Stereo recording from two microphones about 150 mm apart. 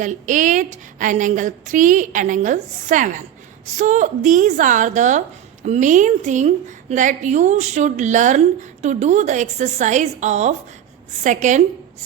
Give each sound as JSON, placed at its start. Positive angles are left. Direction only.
{"t": 0.0, "sound": "a woman's voice", "side_deg": -60}